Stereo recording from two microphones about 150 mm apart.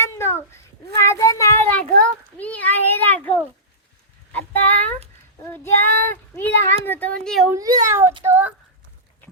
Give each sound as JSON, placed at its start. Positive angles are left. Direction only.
{"t": 0.0, "sound": "child singing", "side_deg": 15}
{"t": 4.3, "sound": "a sound", "side_deg": 10}
{"t": 5.4, "sound": "child singing", "side_deg": 15}
{"t": 6.8, "sound": "speech", "side_deg": 10}
{"t": 7.5, "sound": "a child's voice", "side_deg": -20}
{"t": 8.2, "sound": "a sound", "side_deg": -15}